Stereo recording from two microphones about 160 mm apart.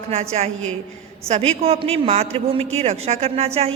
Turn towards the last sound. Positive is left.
turn(degrees=-40)  # may be behind; listen again after turning